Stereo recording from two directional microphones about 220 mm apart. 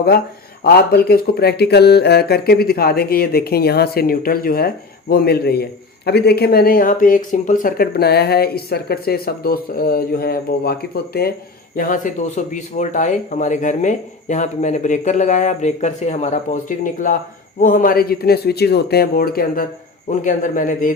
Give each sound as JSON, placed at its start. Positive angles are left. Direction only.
{"t": 0.6, "sound": "speech", "side_deg": 45}